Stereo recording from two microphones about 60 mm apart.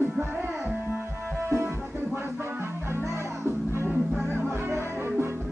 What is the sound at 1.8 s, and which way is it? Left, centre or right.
Music, right.